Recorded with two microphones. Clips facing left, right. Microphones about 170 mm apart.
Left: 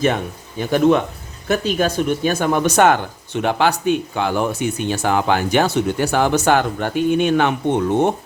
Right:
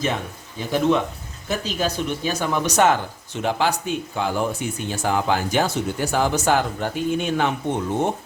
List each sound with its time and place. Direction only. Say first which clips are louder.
0.6 s speech: left 5 dB; 60° left (ahead or behind)